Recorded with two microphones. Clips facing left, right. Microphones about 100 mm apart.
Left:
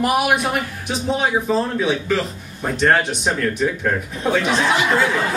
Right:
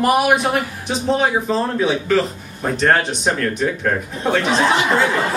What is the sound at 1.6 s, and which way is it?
A man's voice, centre (ahead or behind).